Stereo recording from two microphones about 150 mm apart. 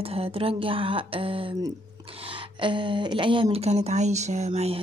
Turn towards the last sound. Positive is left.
turn(degrees=-40)  # may be behind; listen again after turning